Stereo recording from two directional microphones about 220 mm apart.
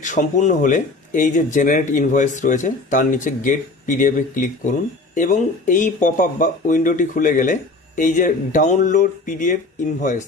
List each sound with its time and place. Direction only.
0.0 s speech: 35° left (ahead or behind)